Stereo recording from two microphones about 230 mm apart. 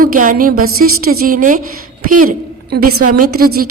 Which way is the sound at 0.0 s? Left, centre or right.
Right.